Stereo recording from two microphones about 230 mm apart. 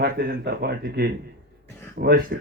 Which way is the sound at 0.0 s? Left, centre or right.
Right.